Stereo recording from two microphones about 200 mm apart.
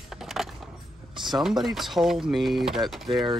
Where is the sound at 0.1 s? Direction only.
Centre (ahead or behind).